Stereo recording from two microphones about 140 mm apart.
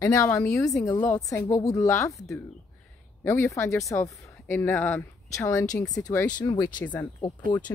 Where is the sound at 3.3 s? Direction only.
20° left (ahead or behind).